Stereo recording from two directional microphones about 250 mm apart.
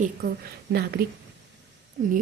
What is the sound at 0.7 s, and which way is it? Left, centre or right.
Speech, right.